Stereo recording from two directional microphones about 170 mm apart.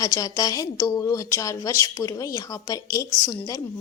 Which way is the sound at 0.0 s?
20° left (ahead or behind).